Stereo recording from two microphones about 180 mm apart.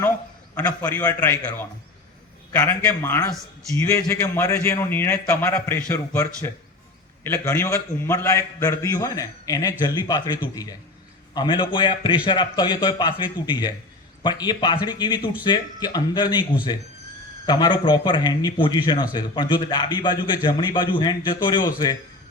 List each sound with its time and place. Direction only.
0.5 s a man's voice: 10° left (ahead or behind)